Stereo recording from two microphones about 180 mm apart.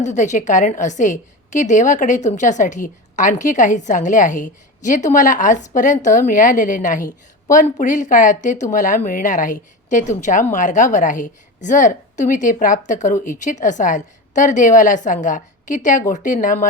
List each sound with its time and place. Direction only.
0.0 s a woman's voice: 40° left (ahead or behind)